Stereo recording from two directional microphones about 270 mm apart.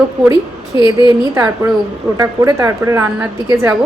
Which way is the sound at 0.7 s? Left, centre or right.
Centre.